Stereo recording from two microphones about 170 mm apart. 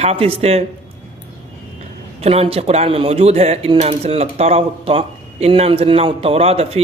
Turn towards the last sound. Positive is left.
turn(degrees=-35)  # may be behind; listen again after turning